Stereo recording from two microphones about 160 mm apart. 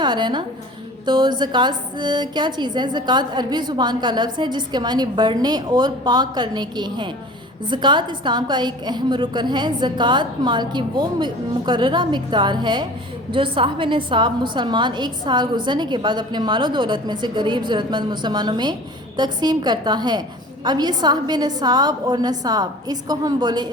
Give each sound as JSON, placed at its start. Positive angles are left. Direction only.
{"t": 0.0, "sound": "a woman's voice", "side_deg": -30}